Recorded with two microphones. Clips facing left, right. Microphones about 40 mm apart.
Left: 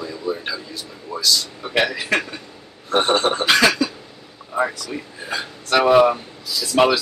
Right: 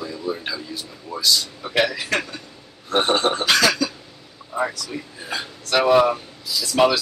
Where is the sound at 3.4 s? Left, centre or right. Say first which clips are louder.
Left 4 dB; left.